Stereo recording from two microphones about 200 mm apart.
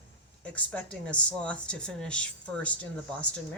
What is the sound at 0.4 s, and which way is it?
Speech, 5° left (ahead or behind).